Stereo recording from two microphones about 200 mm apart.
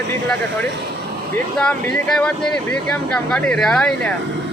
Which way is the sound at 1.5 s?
5° left (ahead or behind).